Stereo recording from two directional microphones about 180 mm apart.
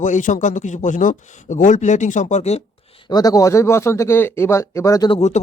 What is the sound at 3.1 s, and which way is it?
Speech, 20° left (ahead or behind).